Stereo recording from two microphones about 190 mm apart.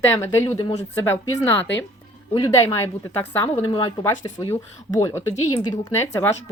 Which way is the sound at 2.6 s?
15° left (ahead or behind).